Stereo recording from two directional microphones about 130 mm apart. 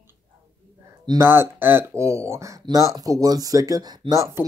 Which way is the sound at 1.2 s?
20° right (ahead or behind).